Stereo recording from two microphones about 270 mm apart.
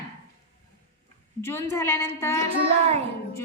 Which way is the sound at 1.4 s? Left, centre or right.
Centre.